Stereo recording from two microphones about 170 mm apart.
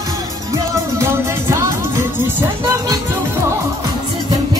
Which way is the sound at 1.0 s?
15° right (ahead or behind).